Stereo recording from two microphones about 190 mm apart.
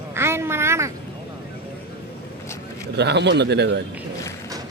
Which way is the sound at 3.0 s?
65° right (ahead or behind).